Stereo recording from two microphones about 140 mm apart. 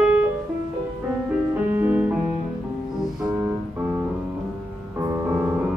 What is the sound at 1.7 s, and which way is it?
Music, 15° right (ahead or behind).